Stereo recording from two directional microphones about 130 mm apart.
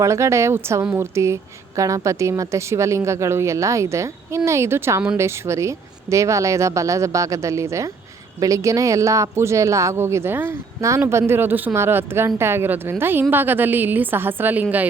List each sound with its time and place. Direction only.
0.0 s a woman's voice: 20° right (ahead or behind)